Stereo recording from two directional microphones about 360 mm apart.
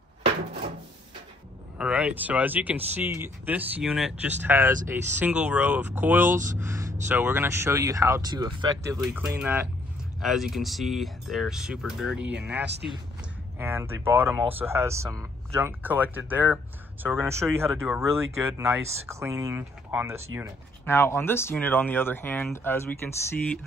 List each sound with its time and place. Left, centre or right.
1.8 s speech: centre
6.3 s speech: right
6.6 s a sound: centre
7.1 s speech: centre
13.6 s speech: centre
20.8 s speech: centre